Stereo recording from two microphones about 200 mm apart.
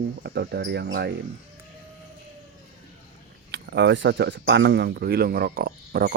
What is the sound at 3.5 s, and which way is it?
Speech, 60° right (ahead or behind).